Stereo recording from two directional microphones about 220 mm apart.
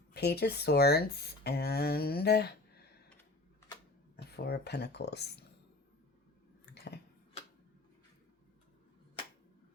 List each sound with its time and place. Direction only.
0.1 s speech: 50° left (ahead or behind)
4.4 s speech: 45° left (ahead or behind)